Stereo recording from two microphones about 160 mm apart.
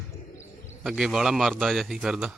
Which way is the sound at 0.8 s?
Centre (ahead or behind).